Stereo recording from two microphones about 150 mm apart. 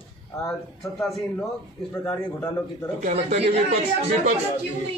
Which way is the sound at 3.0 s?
45° right (ahead or behind).